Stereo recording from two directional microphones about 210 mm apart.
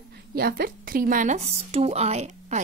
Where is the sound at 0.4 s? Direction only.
45° right (ahead or behind).